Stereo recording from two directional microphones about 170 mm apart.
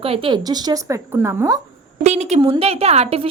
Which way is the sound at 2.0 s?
45° right (ahead or behind).